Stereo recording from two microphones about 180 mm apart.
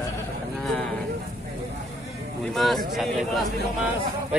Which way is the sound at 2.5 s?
Centre (ahead or behind).